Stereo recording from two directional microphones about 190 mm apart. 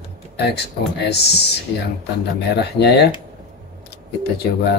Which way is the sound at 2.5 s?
60° left (ahead or behind).